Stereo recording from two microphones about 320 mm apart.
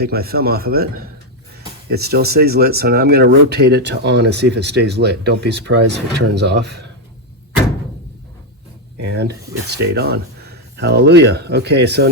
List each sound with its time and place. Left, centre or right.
0.0 s speech: right
9.1 s speech: right